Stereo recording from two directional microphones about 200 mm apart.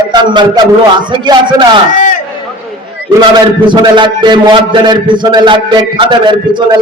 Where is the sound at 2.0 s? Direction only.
40° left (ahead or behind).